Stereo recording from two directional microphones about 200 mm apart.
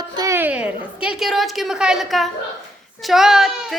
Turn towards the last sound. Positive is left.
turn(degrees=0)  # may be behind; listen again after turning